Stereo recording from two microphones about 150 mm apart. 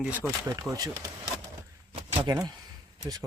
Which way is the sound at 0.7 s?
25° right (ahead or behind).